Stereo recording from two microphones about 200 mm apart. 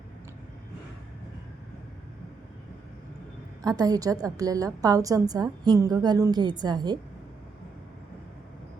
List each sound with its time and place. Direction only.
3.6 s a woman's voice: 20° right (ahead or behind)